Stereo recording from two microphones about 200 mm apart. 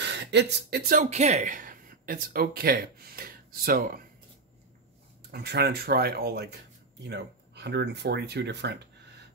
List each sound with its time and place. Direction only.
0.0 s speech: 60° right (ahead or behind)
5.3 s speech: 55° right (ahead or behind)